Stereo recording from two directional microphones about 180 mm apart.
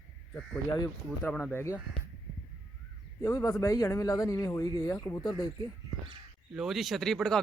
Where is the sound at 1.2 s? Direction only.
10° left (ahead or behind).